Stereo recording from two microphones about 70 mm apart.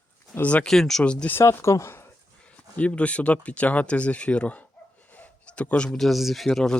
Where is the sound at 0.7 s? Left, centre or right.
Centre.